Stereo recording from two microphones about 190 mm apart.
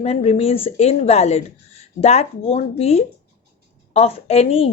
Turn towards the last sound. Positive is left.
turn(degrees=30)  # may be behind; listen again after turning